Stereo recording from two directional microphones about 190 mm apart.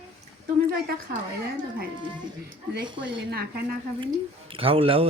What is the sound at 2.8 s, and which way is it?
Speech, 25° right (ahead or behind).